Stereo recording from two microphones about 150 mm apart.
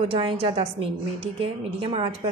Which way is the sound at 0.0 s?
40° right (ahead or behind).